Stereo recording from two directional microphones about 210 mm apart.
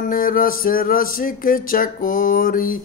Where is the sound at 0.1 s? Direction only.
40° left (ahead or behind).